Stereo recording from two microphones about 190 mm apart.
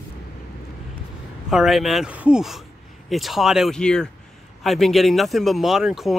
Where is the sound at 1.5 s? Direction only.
Centre (ahead or behind).